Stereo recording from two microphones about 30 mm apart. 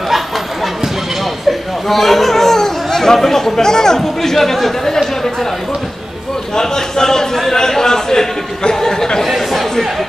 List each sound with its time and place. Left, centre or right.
1.9 s speech: centre
6.5 s a sound: centre
9.5 s chatter: centre